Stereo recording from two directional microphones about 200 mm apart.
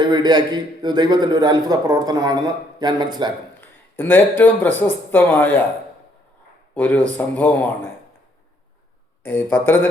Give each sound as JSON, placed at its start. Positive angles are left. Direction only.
{"t": 0.0, "sound": "a man's voice", "side_deg": -20}
{"t": 3.6, "sound": "speech", "side_deg": 10}
{"t": 6.7, "sound": "speech", "side_deg": 10}
{"t": 9.2, "sound": "speech", "side_deg": 10}